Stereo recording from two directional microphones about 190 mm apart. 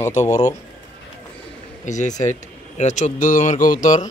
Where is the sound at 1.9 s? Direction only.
40° left (ahead or behind).